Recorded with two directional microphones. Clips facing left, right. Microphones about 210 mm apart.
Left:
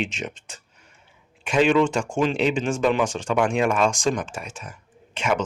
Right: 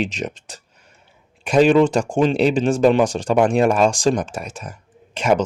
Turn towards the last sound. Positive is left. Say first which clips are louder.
# right 6 dB
turn(degrees=-40)  # may be behind; listen again after turning